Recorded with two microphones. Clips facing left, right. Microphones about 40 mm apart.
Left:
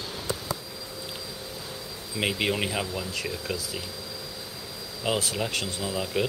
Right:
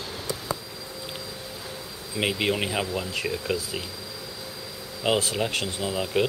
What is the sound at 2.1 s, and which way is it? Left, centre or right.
Speech, centre.